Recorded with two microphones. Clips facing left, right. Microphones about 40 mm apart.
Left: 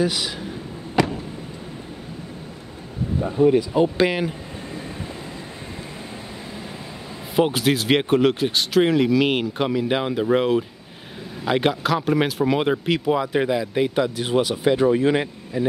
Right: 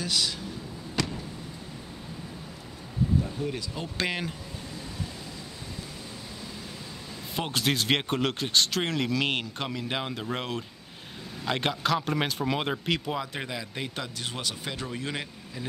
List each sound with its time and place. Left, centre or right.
0.0 s speech: centre
1.0 s a sound: centre
3.2 s speech: left
4.0 s speech: centre
7.3 s speech: centre; by 15.6 s left